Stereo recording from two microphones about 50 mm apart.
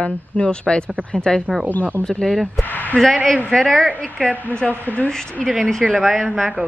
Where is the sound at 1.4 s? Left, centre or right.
Right.